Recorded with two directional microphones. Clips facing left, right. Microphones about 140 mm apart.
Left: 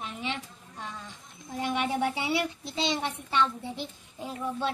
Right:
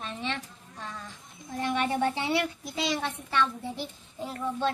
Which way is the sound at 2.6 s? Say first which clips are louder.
Even; 25° left (ahead or behind).